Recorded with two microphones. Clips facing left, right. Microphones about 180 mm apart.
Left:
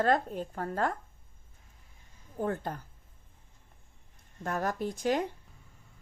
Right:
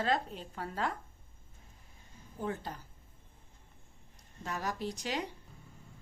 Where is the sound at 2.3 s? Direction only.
50° left (ahead or behind).